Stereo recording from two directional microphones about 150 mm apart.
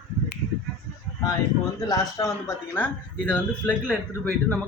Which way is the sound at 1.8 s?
25° left (ahead or behind).